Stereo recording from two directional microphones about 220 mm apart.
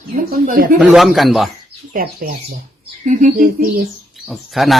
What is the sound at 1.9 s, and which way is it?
Speech, 40° right (ahead or behind).